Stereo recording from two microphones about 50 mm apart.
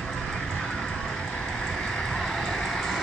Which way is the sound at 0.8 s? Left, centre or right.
Centre.